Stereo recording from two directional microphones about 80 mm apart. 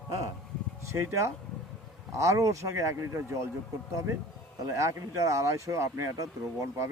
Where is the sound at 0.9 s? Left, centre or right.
Right.